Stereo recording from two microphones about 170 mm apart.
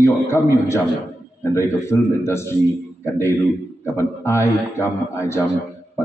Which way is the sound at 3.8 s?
15° left (ahead or behind).